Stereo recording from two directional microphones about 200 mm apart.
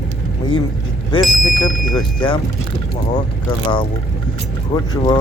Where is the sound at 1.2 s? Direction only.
Centre (ahead or behind).